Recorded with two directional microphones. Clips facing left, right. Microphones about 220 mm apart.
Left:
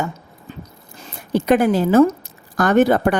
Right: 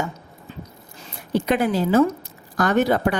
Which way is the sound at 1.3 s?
45° left (ahead or behind).